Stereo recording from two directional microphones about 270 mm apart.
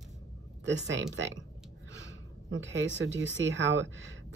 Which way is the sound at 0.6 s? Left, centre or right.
Right.